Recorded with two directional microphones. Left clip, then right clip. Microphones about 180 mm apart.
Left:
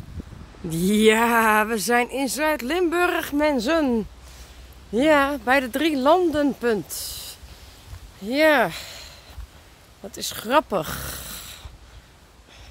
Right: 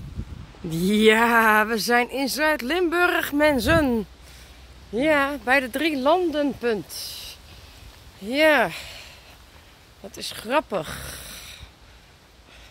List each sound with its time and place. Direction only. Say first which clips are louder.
0.7 s speech: even; centre (ahead or behind)
4.9 s speech: left 3 dB; 25° left (ahead or behind)
8.2 s speech: even; 10° left (ahead or behind)